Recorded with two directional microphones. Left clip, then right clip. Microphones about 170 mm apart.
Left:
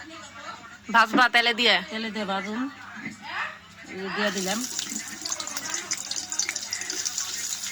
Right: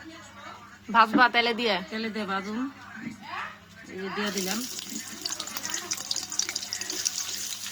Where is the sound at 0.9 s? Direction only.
Centre (ahead or behind).